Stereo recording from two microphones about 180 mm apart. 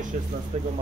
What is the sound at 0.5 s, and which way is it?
Speech, 40° right (ahead or behind).